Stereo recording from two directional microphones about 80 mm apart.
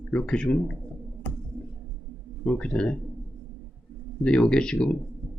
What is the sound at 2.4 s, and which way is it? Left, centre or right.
Speech, centre.